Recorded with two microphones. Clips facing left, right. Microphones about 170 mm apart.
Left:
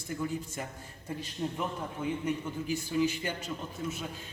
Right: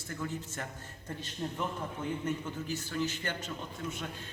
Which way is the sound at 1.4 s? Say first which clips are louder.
Left 1 dB; 5° left (ahead or behind).